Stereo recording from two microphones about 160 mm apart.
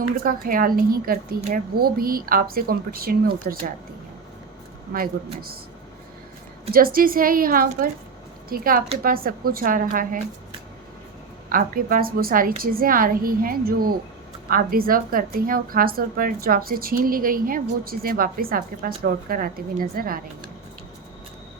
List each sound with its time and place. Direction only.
0.3 s a woman's voice: 60° right (ahead or behind)
4.9 s speech: 70° right (ahead or behind)
6.7 s a woman's voice: 65° right (ahead or behind)
11.4 s a woman's voice: 60° right (ahead or behind)